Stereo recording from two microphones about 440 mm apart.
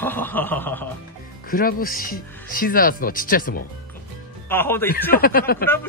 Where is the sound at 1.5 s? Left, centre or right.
Centre.